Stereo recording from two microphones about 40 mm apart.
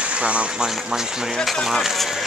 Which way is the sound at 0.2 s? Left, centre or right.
Right.